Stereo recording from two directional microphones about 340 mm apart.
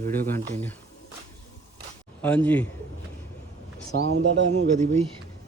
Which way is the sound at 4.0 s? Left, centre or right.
Right.